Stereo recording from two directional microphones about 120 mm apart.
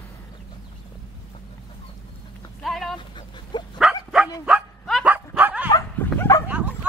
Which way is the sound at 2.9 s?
40° left (ahead or behind).